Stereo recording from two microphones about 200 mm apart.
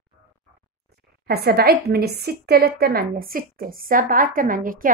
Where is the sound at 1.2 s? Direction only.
50° right (ahead or behind).